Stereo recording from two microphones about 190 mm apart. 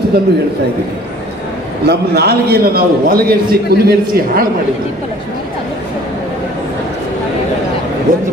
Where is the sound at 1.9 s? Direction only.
55° right (ahead or behind).